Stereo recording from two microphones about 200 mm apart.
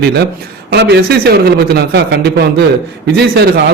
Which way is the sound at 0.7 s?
55° right (ahead or behind).